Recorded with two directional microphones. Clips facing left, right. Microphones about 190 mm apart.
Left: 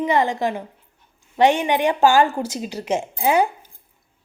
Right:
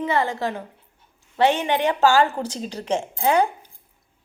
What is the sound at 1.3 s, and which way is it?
Speech, 15° left (ahead or behind).